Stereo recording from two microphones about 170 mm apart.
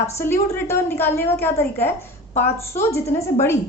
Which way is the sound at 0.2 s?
15° left (ahead or behind).